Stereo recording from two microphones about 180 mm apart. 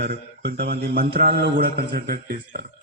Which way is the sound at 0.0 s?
65° right (ahead or behind).